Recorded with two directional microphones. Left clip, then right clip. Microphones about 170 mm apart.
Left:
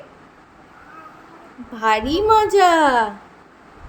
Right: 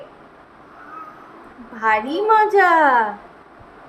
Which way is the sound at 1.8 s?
35° left (ahead or behind).